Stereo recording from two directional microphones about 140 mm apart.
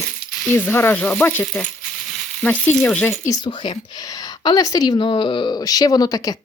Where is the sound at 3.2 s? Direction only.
25° left (ahead or behind).